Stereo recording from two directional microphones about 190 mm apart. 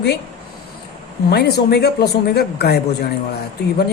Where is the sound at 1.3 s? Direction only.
60° left (ahead or behind).